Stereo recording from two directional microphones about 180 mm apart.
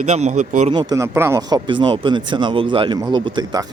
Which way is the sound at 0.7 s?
25° right (ahead or behind).